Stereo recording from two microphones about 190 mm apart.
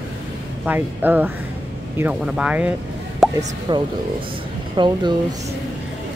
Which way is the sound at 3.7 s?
20° right (ahead or behind).